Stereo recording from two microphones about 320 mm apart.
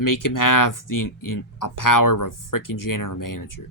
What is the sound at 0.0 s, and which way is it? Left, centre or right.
Speech, left.